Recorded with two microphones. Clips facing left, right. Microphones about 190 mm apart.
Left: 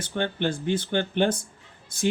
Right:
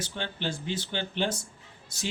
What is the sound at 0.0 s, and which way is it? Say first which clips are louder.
Speech: left 7 dB; 55° left (ahead or behind).